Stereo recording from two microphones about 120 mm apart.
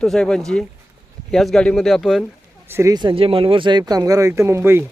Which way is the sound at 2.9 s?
40° right (ahead or behind).